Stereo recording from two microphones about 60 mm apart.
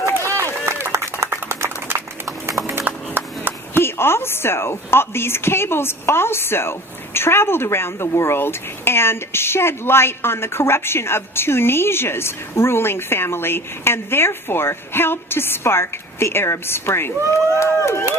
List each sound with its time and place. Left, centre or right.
0.3 s run: right
1.2 s a sound: right
2.6 s music: right
3.8 s a woman's voice: left